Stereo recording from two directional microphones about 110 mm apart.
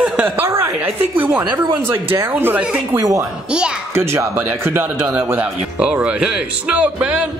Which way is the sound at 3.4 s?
10° right (ahead or behind).